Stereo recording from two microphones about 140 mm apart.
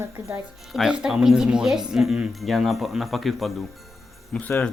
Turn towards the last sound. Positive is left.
turn(degrees=10)  # may be behind; listen again after turning